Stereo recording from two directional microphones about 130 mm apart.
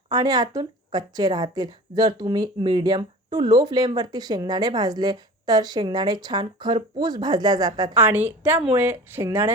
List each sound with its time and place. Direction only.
0.1 s speech: 30° right (ahead or behind)
7.9 s speech: 15° right (ahead or behind)